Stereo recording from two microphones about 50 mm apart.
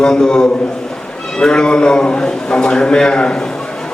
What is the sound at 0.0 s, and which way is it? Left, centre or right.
A man's voice, centre.